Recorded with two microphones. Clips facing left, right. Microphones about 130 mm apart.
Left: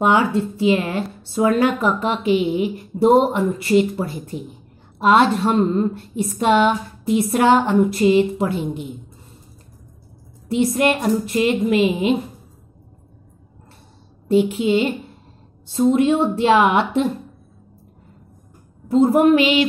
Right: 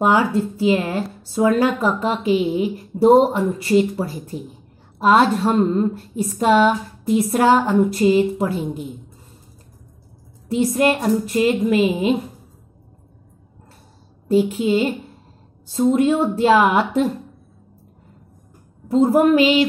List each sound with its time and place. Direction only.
0.0 s a woman's voice: 40° right (ahead or behind)
10.5 s a woman's voice: 40° right (ahead or behind)
14.3 s a woman's voice: 40° right (ahead or behind)
18.9 s a woman's voice: 40° right (ahead or behind)